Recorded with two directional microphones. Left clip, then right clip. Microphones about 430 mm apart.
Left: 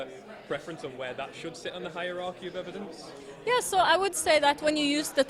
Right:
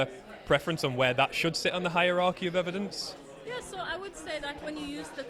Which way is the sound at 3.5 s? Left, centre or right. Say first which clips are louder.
Left 13 dB; left.